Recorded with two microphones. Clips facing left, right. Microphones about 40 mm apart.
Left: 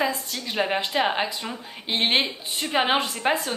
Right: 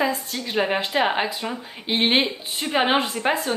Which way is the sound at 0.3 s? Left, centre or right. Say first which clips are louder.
Right 2 dB; centre.